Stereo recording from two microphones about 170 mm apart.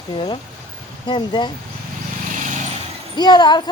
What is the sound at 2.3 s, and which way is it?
Vehicle, 50° right (ahead or behind).